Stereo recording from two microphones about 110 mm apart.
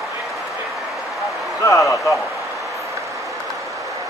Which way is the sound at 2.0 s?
Centre (ahead or behind).